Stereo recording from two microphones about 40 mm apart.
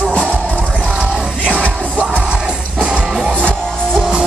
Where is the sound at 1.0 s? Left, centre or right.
Right.